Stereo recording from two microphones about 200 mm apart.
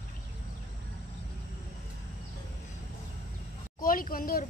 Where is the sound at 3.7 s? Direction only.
45° left (ahead or behind).